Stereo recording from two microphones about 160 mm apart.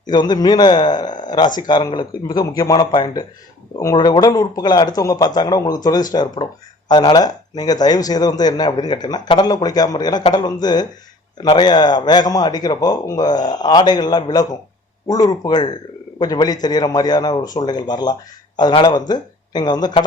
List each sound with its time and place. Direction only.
0.1 s a man's voice: 25° left (ahead or behind)